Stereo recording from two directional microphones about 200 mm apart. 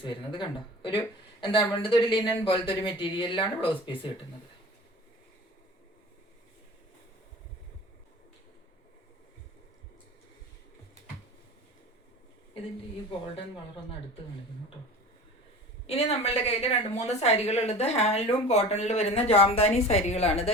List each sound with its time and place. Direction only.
0.0 s speech: 25° left (ahead or behind)
15.9 s a woman's voice: 30° left (ahead or behind)